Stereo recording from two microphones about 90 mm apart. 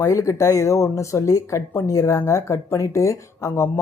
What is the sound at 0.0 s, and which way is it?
Speech, 35° left (ahead or behind).